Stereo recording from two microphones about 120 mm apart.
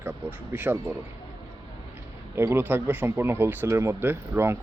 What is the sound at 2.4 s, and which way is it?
Speech, 20° right (ahead or behind).